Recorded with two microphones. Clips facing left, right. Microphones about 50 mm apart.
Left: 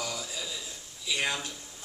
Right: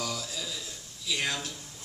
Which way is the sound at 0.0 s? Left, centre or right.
Centre.